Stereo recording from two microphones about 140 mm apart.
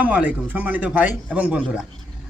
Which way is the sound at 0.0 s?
10° right (ahead or behind).